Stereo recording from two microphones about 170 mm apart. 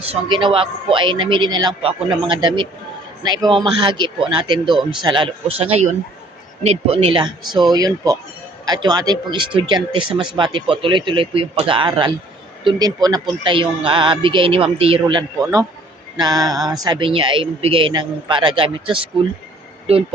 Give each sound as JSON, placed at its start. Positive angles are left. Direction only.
{"t": 0.1, "sound": "speech", "side_deg": -30}